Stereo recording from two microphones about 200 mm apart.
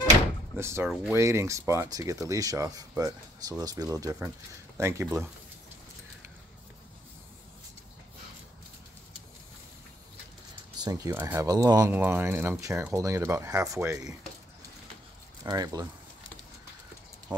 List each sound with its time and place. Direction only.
0.6 s speech: 10° right (ahead or behind)
10.8 s speech: 15° right (ahead or behind)
15.4 s speech: 20° right (ahead or behind)
17.3 s a sound: 5° right (ahead or behind)